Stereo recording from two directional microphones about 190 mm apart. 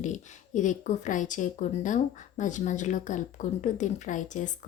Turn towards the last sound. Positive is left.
turn(degrees=40)  # may be behind; listen again after turning